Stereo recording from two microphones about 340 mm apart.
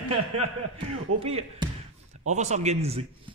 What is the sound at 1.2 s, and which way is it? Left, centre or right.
A man's voice, centre.